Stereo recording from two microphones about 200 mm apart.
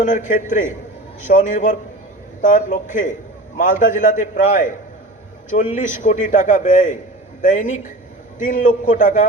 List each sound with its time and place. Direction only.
0.0 s a man's voice: 40° left (ahead or behind)